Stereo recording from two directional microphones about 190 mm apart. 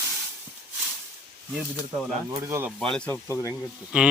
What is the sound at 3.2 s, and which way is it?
Speech, 15° left (ahead or behind).